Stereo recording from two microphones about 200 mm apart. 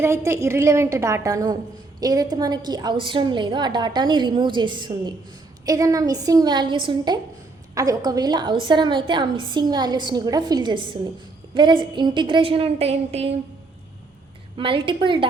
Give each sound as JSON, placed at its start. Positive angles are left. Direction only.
{"t": 0.0, "sound": "a woman's voice", "side_deg": -15}
{"t": 14.5, "sound": "a woman's voice", "side_deg": -25}